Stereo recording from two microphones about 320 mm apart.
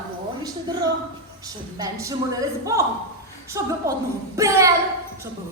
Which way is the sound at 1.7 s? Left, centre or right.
Centre.